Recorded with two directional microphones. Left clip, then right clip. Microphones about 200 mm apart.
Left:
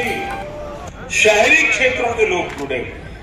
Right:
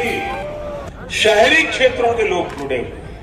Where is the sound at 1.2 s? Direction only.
10° left (ahead or behind).